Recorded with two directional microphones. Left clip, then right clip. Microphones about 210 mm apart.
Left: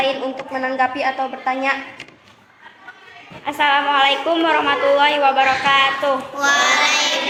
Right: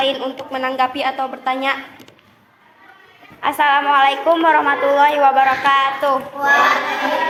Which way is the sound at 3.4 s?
40° right (ahead or behind).